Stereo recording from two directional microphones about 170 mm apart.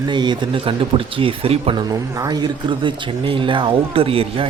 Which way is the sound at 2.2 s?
25° right (ahead or behind).